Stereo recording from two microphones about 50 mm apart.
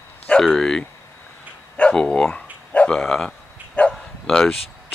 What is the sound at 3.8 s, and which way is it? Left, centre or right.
Bow-wow, left.